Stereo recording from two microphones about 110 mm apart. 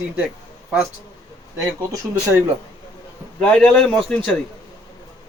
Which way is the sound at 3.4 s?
5° left (ahead or behind).